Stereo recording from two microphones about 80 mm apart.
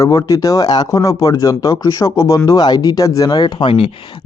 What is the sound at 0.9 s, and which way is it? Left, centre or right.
Speech, left.